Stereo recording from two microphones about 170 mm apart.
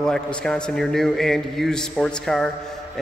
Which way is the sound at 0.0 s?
5° left (ahead or behind).